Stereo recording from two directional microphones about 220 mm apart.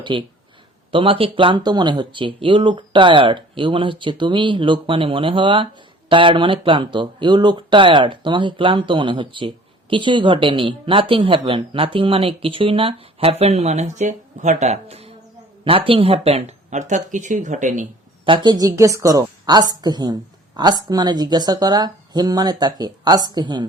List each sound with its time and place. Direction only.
0.0 s speech: 20° right (ahead or behind)
18.3 s a woman's voice: 20° right (ahead or behind)